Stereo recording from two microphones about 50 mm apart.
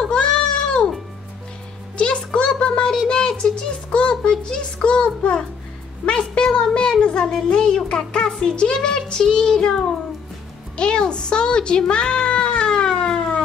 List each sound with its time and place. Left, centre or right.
0.0 s goat: centre
2.0 s a sound: left
8.8 s child singing: centre
10.8 s music: centre